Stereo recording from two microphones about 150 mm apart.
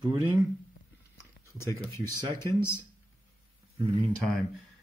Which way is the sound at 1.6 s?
20° left (ahead or behind).